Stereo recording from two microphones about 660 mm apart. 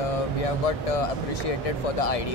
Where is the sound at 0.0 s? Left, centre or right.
Left.